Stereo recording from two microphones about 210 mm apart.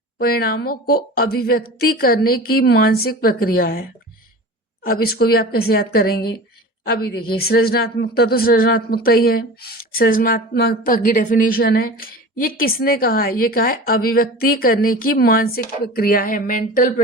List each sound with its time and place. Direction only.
0.2 s speech: 45° left (ahead or behind)